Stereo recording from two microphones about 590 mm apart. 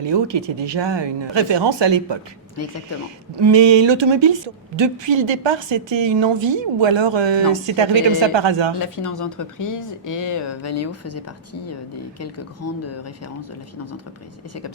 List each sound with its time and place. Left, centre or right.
0.0 s a woman's voice: right
3.3 s a woman's voice: right
9.0 s speech: left
12.2 s speech: left